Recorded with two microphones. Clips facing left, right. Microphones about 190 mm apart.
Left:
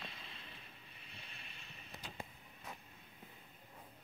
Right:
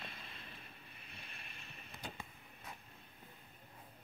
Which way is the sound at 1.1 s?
55° right (ahead or behind).